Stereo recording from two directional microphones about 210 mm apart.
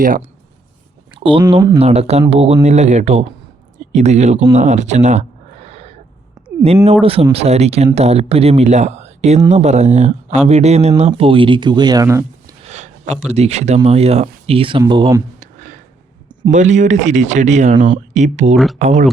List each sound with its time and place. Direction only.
0.0 s speech: 40° right (ahead or behind)
1.1 s a sound: 25° right (ahead or behind)
1.5 s speech: 20° right (ahead or behind)
3.8 s a sound: 35° right (ahead or behind)
7.0 s speech: 25° right (ahead or behind)
12.6 s speech: 35° right (ahead or behind)
15.4 s a sound: 35° right (ahead or behind)
16.5 s speech: 35° right (ahead or behind)
18.5 s speech: centre (ahead or behind)
18.8 s speech: 35° right (ahead or behind)